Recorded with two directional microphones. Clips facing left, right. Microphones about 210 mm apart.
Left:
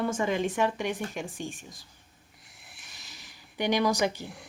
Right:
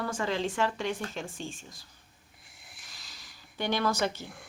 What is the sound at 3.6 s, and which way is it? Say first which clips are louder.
Speech: left 3 dB; 15° left (ahead or behind).